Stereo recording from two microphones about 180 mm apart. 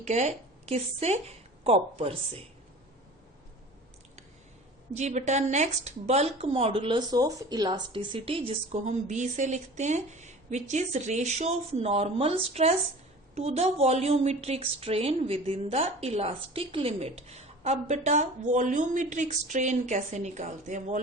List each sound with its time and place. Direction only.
0.0 s a woman's voice: 40° right (ahead or behind)
4.9 s speech: 40° right (ahead or behind)